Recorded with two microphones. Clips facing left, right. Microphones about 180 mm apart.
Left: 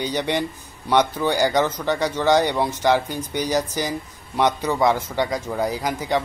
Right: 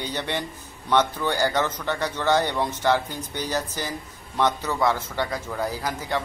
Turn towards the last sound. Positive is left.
turn(degrees=15)  # may be behind; listen again after turning